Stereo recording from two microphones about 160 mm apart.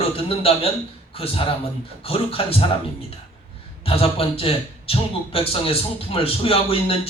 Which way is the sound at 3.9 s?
35° left (ahead or behind).